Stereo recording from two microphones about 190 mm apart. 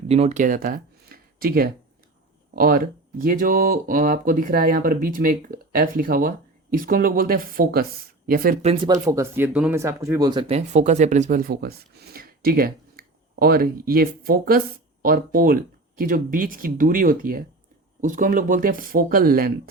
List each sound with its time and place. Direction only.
0.1 s speech: 35° right (ahead or behind); by 8.5 s 50° right (ahead or behind)
8.6 s speech: 25° right (ahead or behind); by 19.5 s 50° right (ahead or behind)